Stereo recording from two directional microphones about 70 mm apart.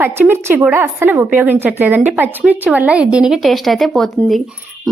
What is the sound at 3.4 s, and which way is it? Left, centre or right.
Speech, centre.